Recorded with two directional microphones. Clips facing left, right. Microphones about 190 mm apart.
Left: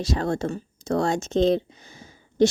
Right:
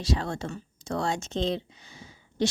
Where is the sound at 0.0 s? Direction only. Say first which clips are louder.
Left 5 dB; 45° left (ahead or behind).